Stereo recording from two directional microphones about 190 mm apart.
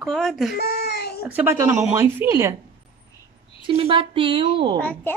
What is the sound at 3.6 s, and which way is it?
A woman's voice, 30° right (ahead or behind).